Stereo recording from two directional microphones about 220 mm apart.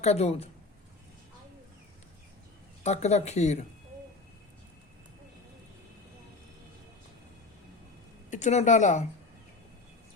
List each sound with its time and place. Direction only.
0.0 s speech: 30° left (ahead or behind)
2.8 s speech: 30° left (ahead or behind)
8.3 s speech: 30° left (ahead or behind)